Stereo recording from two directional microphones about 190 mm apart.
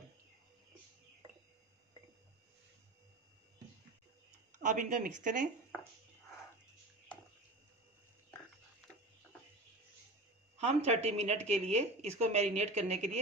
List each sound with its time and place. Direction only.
4.6 s speech: 45° right (ahead or behind)
10.6 s speech: 35° right (ahead or behind)